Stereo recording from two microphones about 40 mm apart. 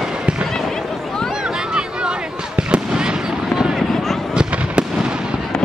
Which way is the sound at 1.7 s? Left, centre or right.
Right.